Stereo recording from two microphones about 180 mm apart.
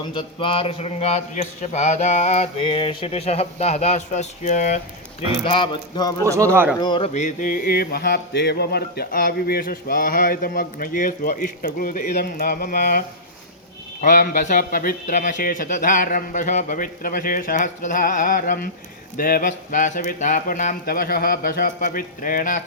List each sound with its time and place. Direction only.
0.1 s mantra: 25° left (ahead or behind); by 4.8 s 45° left (ahead or behind)
5.5 s speech: 30° left (ahead or behind)
6.2 s speech: 15° right (ahead or behind)
6.7 s speech: 25° left (ahead or behind)
7.1 s music: 40° left (ahead or behind)
14.0 s music: 50° left (ahead or behind)